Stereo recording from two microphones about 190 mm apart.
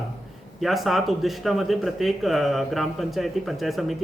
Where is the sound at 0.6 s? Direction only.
Centre (ahead or behind).